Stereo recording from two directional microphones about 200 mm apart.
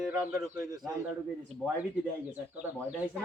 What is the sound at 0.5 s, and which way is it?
Speech, 15° right (ahead or behind).